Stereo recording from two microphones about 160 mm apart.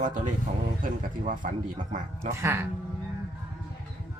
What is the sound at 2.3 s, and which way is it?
Speech, 15° right (ahead or behind).